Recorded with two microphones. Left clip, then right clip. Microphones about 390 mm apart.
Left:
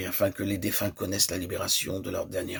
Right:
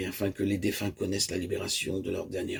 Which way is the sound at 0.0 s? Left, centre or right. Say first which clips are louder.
Left 3 dB; left.